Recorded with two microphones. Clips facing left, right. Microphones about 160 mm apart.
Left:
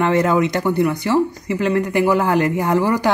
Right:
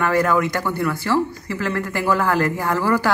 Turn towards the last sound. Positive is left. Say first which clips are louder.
# left 3 dB
turn(degrees=20)  # may be behind; listen again after turning